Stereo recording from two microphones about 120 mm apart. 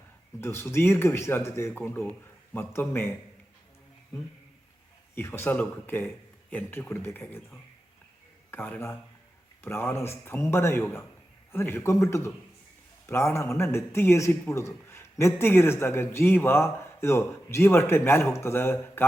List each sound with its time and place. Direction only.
0.4 s a man's voice: 20° left (ahead or behind)
5.1 s speech: 20° left (ahead or behind)
8.4 s a man's voice: 15° left (ahead or behind)